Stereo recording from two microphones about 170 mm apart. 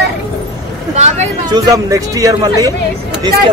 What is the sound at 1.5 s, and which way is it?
Speech, 20° right (ahead or behind).